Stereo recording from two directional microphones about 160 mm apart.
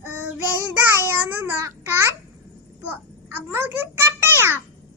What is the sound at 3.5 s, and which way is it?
A child's voice, 15° right (ahead or behind).